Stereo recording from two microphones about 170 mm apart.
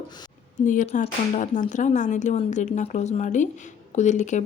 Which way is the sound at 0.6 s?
50° left (ahead or behind).